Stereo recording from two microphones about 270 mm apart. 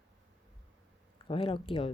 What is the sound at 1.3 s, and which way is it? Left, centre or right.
Speech, centre.